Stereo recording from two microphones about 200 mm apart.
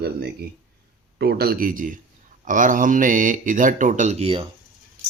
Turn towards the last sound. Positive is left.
turn(degrees=-30)  # may be behind; listen again after turning